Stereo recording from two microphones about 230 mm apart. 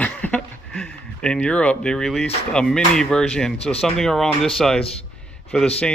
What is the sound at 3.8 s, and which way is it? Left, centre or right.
A man's voice, centre.